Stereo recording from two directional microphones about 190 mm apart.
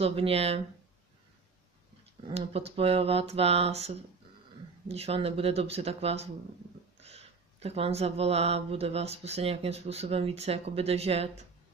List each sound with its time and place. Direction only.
0.0 s speech: 30° right (ahead or behind)
2.2 s speech: 30° right (ahead or behind)